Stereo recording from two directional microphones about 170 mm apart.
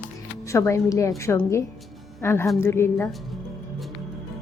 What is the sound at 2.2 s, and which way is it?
Speech, 15° left (ahead or behind).